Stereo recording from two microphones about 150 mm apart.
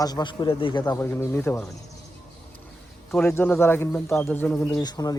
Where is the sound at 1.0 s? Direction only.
15° left (ahead or behind).